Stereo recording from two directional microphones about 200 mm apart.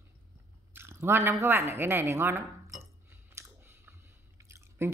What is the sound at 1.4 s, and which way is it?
Speech, 15° right (ahead or behind).